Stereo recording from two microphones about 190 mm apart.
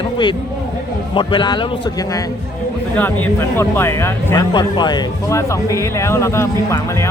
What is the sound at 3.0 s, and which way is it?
Speech, 10° left (ahead or behind).